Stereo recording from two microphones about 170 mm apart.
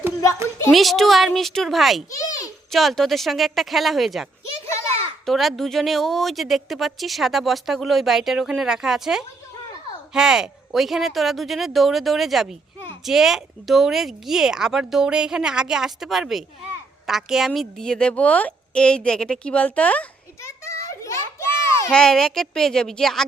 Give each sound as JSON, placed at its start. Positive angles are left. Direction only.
{"t": 0.7, "sound": "a woman's voice", "side_deg": 0}
{"t": 2.0, "sound": "a sound", "side_deg": 20}
{"t": 2.7, "sound": "a woman's voice", "side_deg": 0}
{"t": 21.9, "sound": "a woman's voice", "side_deg": 5}